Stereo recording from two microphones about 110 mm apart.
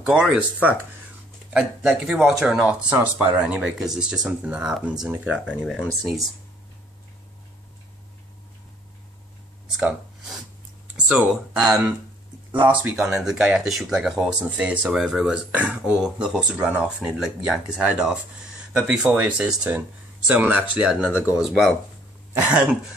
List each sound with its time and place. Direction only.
0.0 s speech: 10° right (ahead or behind)
9.7 s a sound: 10° right (ahead or behind)
11.1 s speech: 5° right (ahead or behind)
12.9 s speech: 5° right (ahead or behind)